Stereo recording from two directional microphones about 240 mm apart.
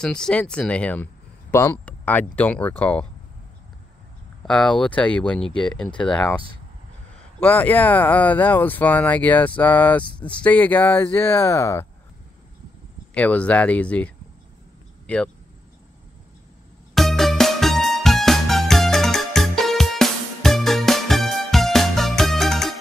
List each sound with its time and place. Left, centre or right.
0.0 s speech: centre
4.5 s speech: centre
10.0 s speech: left
10.4 s speech: centre
13.1 s speech: centre
16.9 s music: centre